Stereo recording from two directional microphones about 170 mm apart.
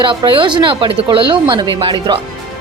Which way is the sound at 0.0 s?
30° right (ahead or behind).